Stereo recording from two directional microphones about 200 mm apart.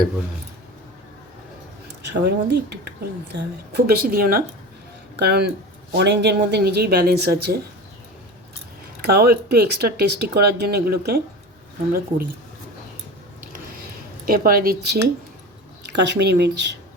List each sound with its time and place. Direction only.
2.0 s speech: 60° right (ahead or behind)
9.0 s speech: 50° right (ahead or behind)
14.3 s speech: 45° right (ahead or behind)